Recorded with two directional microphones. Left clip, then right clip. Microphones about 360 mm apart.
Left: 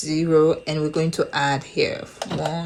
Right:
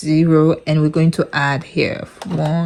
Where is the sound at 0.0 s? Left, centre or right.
Right.